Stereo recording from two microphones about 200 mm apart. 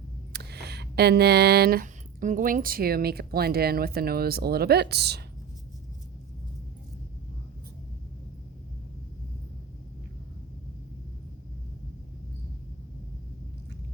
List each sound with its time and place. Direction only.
0.3 s speech: 55° right (ahead or behind)